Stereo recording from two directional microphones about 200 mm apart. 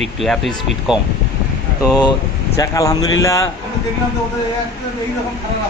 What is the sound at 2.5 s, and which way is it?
Speech, 15° left (ahead or behind).